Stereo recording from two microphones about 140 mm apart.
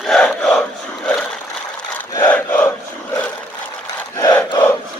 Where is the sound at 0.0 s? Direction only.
5° left (ahead or behind).